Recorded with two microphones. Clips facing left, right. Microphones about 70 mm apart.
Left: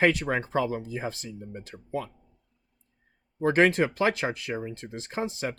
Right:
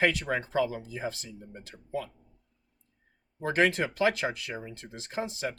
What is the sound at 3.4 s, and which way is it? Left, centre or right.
Speech, left.